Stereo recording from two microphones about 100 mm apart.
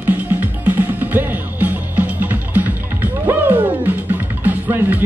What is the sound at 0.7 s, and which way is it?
Music, 20° right (ahead or behind).